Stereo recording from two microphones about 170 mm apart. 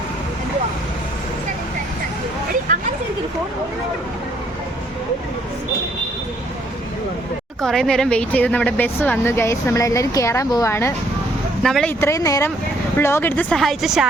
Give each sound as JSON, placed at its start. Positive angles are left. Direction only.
{"t": 7.6, "sound": "speech", "side_deg": 5}
{"t": 11.6, "sound": "speech", "side_deg": 5}
{"t": 11.9, "sound": "speech", "side_deg": 15}